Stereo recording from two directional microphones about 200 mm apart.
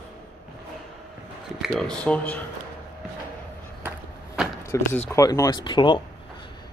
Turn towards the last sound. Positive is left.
turn(degrees=25)  # may be behind; listen again after turning